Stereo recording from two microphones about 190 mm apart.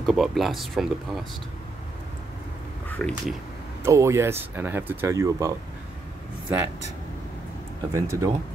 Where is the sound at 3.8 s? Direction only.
15° right (ahead or behind).